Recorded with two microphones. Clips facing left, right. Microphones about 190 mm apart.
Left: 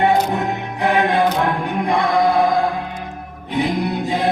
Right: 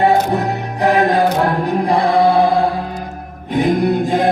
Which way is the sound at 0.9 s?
40° right (ahead or behind).